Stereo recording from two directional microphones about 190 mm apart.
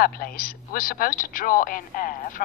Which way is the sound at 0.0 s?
50° left (ahead or behind).